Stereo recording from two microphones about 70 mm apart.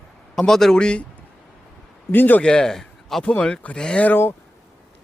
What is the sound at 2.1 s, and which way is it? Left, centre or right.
Speech, left.